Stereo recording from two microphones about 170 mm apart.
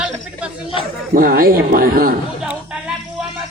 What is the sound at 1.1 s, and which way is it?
Speech, 60° right (ahead or behind).